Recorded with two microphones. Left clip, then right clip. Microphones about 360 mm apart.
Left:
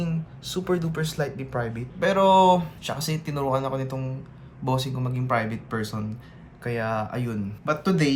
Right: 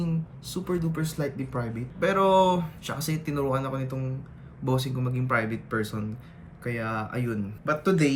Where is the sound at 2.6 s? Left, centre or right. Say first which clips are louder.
Left 3 dB; centre.